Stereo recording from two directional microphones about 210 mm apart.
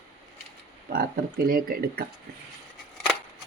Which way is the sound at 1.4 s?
45° right (ahead or behind).